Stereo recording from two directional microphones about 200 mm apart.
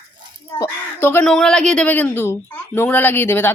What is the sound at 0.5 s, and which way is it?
Speech, 10° left (ahead or behind).